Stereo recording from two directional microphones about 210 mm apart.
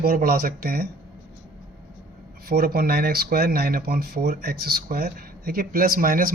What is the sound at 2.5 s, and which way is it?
Speech, 45° right (ahead or behind).